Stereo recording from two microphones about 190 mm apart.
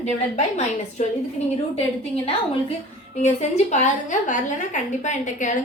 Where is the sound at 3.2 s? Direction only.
35° left (ahead or behind).